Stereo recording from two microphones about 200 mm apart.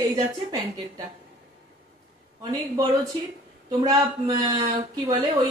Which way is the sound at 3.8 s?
20° right (ahead or behind).